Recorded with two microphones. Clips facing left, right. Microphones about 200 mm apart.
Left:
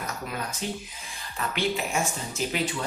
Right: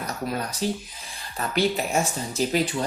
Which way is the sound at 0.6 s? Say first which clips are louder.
Right 6 dB; 35° right (ahead or behind).